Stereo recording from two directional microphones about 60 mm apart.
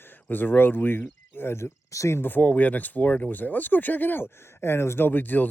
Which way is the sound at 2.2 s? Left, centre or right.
Left.